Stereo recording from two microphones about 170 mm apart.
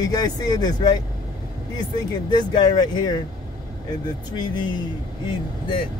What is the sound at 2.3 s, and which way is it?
Speech, 25° left (ahead or behind).